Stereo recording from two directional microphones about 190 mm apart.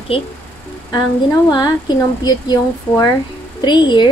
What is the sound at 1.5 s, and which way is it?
Speech, 20° left (ahead or behind).